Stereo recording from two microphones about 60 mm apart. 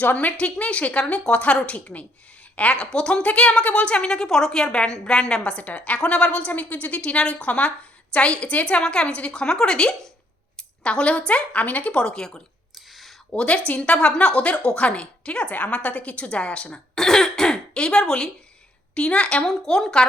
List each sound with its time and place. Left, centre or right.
0.0 s a woman's voice: left
10.6 s a sound: centre
11.3 s a woman's voice: left
12.9 s a sound: centre
13.3 s a woman's voice: centre
16.9 s throat clearing: centre
18.9 s a woman's voice: centre